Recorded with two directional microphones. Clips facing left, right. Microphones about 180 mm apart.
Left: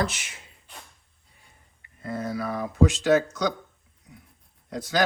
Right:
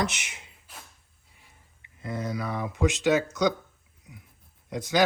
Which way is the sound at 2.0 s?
20° right (ahead or behind).